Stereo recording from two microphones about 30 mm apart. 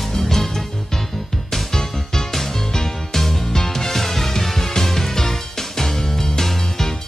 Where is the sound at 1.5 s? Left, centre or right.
Centre.